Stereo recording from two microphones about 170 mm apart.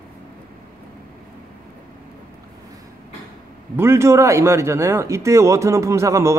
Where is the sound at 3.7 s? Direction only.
15° right (ahead or behind).